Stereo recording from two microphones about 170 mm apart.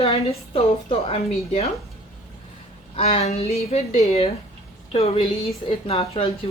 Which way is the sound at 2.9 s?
35° left (ahead or behind).